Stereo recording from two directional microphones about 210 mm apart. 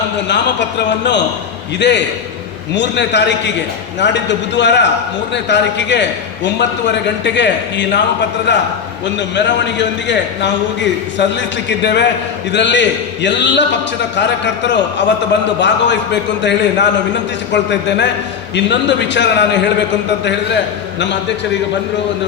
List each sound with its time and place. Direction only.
0.9 s a man's voice: 55° left (ahead or behind)